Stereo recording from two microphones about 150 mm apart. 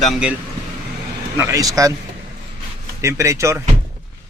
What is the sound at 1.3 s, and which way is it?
Speech, 20° right (ahead or behind).